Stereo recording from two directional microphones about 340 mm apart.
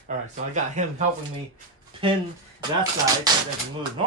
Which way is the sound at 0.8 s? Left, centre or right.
Right.